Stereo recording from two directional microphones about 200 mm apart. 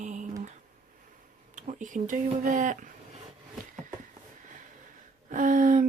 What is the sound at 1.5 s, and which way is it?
Speech, 40° right (ahead or behind).